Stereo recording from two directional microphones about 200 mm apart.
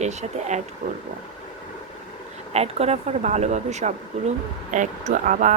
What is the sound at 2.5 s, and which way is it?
Speech, 30° right (ahead or behind).